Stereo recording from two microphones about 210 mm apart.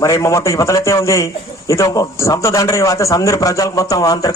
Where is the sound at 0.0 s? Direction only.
15° left (ahead or behind).